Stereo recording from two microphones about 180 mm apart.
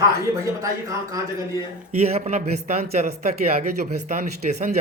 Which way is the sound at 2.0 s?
35° right (ahead or behind).